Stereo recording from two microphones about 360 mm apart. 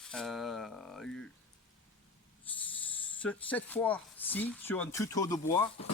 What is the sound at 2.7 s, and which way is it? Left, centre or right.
Speech, centre.